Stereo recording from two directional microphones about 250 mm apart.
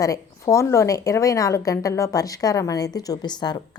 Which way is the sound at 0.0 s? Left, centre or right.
Centre.